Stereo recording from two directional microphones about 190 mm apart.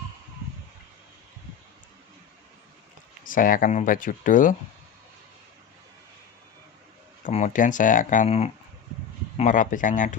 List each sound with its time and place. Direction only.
3.2 s speech: 45° left (ahead or behind)
7.3 s speech: 40° left (ahead or behind)